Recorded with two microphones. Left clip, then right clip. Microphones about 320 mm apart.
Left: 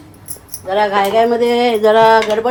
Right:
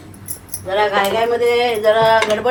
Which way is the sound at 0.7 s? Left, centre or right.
Left.